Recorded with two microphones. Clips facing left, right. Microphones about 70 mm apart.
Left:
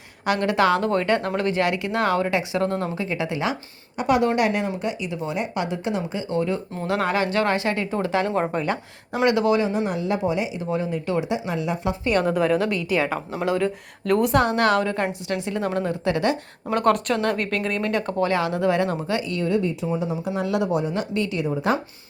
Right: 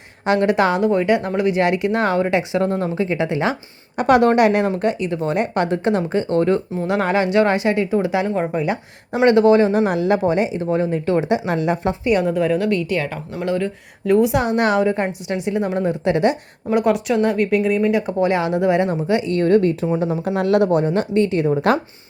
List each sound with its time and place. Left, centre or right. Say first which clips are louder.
0.4 s speech: right 2 dB; right
3.9 s speech: right 6 dB; right
6.8 s speech: right 3 dB; right
9.2 s speech: right 7 dB; right
9.8 s speech: right 7 dB; right
10.2 s speech: right 6 dB; right
11.3 s speech: right 6 dB; right
12.2 s a woman's voice: right 2 dB; centre
14.4 s speech: right 3 dB; centre
16.7 s speech: right 3 dB; centre; by 19.4 s right
19.4 s speech: right 10 dB; right